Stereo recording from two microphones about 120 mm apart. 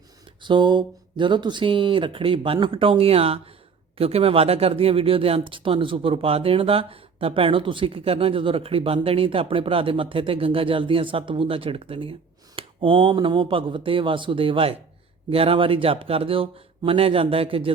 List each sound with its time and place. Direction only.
0.4 s speech: 40° right (ahead or behind)